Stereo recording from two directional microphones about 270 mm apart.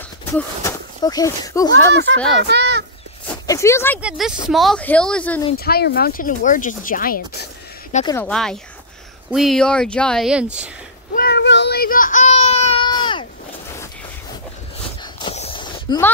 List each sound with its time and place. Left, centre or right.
0.3 s speech: centre
2.3 s speech: right
3.3 s speech: centre
4.0 s speech: centre
5.6 s speech: left
7.9 s speech: centre
8.2 s speech: centre
11.1 s baby cry: left; by 13.3 s centre
15.1 s a sound: left